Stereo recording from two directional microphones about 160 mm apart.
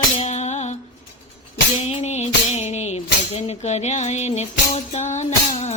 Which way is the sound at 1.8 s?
45° left (ahead or behind).